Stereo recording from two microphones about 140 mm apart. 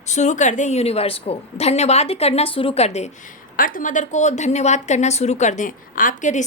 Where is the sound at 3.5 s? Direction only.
75° left (ahead or behind).